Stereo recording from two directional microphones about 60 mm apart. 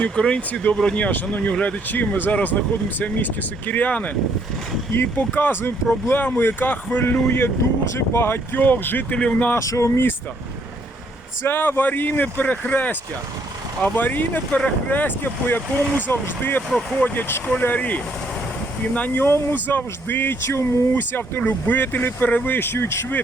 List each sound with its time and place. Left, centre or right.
0.0 s speech: centre
1.9 s speech: left
9.1 s speech: centre
9.6 s speech: left
11.4 s speech: left
19.2 s speech: left